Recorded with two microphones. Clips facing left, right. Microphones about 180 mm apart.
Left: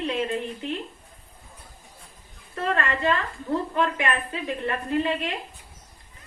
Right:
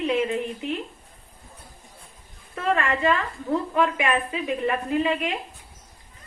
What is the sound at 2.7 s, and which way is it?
Speech, 10° right (ahead or behind).